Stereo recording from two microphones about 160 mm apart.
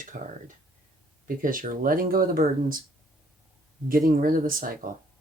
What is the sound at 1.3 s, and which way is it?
Speech, 60° right (ahead or behind).